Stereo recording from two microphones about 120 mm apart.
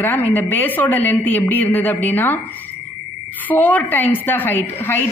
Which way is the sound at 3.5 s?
15° left (ahead or behind).